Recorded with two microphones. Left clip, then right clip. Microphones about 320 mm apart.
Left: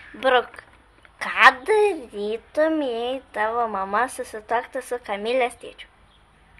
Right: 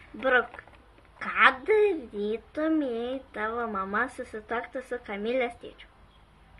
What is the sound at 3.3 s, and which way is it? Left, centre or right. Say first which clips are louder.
Speech: left 9 dB; left.